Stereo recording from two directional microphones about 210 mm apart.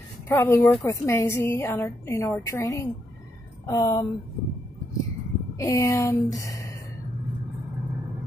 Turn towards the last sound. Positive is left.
turn(degrees=15)  # may be behind; listen again after turning